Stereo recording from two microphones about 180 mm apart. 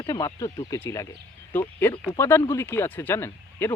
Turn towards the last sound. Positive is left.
turn(degrees=10)  # may be behind; listen again after turning